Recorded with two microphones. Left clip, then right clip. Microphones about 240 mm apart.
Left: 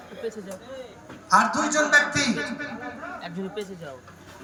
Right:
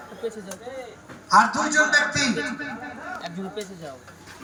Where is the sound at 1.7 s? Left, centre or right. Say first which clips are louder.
Left 1 dB; centre.